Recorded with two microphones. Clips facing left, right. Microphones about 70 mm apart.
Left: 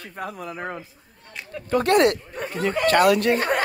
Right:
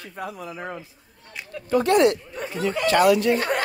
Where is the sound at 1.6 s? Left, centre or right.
Left.